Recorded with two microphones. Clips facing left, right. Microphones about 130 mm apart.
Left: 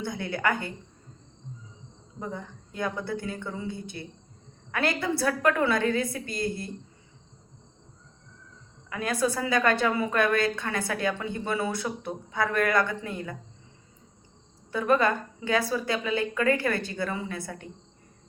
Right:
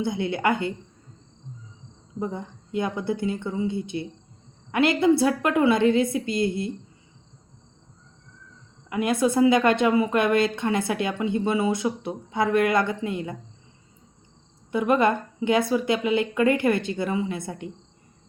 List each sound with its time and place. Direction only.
0.0 s a woman's voice: 20° right (ahead or behind)
2.1 s a woman's voice: 20° right (ahead or behind)
8.9 s a woman's voice: 20° right (ahead or behind)
14.7 s a woman's voice: 20° right (ahead or behind)